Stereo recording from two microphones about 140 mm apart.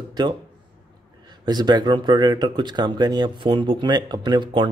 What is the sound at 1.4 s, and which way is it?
Speech, 30° right (ahead or behind).